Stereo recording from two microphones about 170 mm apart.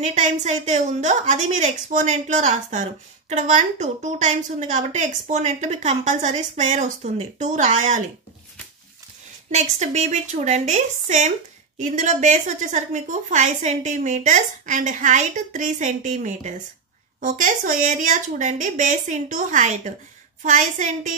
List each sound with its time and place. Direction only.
0.0 s a woman's voice: 45° right (ahead or behind)
9.5 s a woman's voice: 40° right (ahead or behind)